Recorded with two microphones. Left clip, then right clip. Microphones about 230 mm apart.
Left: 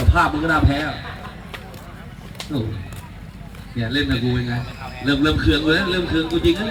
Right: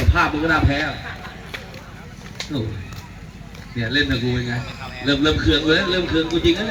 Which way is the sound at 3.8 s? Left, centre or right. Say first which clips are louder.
Right 2 dB; left.